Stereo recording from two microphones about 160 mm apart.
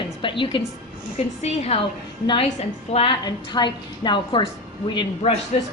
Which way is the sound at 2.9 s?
30° left (ahead or behind).